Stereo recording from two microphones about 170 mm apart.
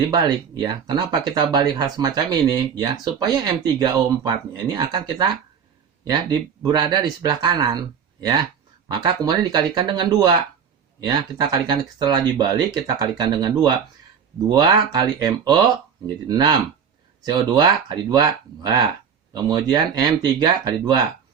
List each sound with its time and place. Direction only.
0.1 s speech: 25° right (ahead or behind)
6.6 s speech: 25° right (ahead or behind)